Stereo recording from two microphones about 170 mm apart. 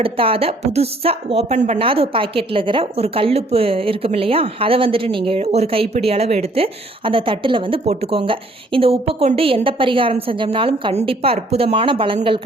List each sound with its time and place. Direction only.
0.0 s speech: 35° right (ahead or behind)